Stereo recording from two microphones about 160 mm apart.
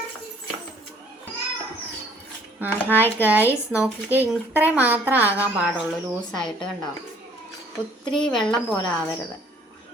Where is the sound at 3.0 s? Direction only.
10° right (ahead or behind).